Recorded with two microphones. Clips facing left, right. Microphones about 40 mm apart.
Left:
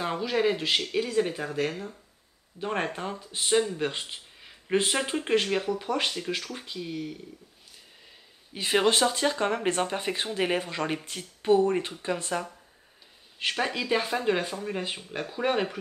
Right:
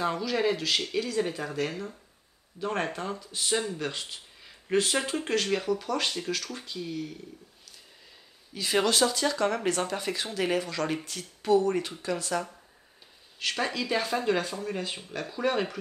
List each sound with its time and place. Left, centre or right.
0.0 s speech: centre
2.6 s speech: left
3.9 s a sound: left
4.9 s speech: centre
8.7 s speech: left